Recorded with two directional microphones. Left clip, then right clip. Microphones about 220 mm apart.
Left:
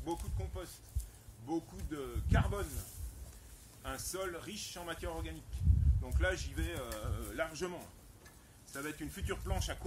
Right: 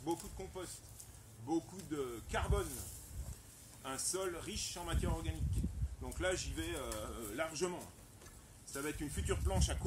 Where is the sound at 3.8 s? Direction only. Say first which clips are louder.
Even; 15° left (ahead or behind).